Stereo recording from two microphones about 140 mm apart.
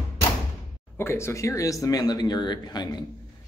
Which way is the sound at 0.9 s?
20° left (ahead or behind).